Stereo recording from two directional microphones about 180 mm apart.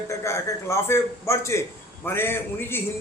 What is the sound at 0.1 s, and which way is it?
Speech, 15° left (ahead or behind).